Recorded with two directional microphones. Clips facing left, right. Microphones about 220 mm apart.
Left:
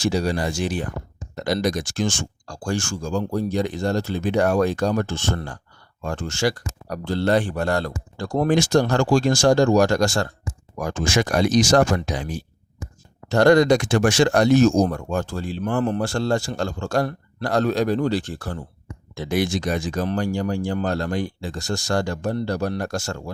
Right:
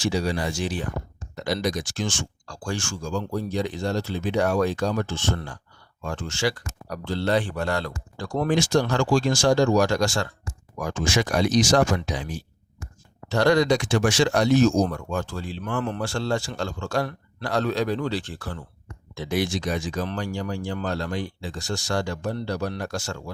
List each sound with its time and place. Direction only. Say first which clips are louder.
0.0 s speech: left 3 dB; 40° left (ahead or behind)